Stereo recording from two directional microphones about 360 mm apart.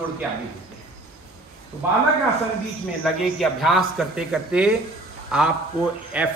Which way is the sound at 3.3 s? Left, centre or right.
Centre.